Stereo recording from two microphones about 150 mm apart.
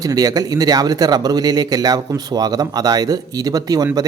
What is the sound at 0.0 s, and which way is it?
Speech, 25° right (ahead or behind).